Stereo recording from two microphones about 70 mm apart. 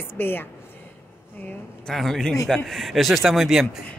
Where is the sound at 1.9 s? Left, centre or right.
Centre.